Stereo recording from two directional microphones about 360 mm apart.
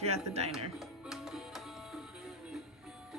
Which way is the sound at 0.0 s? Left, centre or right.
Centre.